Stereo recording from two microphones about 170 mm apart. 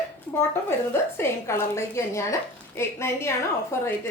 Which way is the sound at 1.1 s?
15° left (ahead or behind).